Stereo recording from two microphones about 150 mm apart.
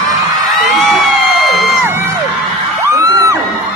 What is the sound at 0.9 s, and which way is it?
Crowd, centre (ahead or behind).